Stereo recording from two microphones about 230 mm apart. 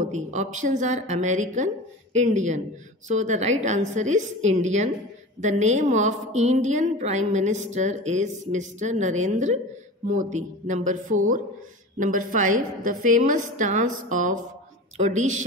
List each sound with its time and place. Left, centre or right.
0.0 s a woman's voice: right